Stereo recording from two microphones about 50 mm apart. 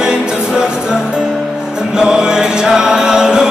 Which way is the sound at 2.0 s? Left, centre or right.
Centre.